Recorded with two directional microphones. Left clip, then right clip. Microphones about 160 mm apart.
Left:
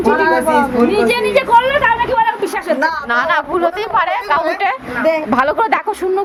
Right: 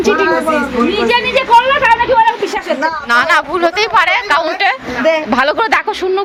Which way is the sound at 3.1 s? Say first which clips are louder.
Right 7 dB; 20° right (ahead or behind).